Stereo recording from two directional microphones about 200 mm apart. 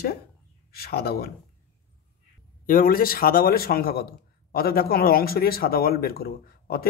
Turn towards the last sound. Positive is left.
turn(degrees=50)  # may be behind; listen again after turning